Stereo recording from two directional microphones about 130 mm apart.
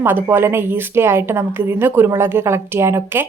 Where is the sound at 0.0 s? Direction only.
15° right (ahead or behind).